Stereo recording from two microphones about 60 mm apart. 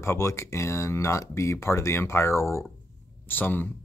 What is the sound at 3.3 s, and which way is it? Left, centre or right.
Speech, left.